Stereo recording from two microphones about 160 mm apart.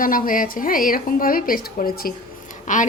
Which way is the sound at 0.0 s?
60° left (ahead or behind).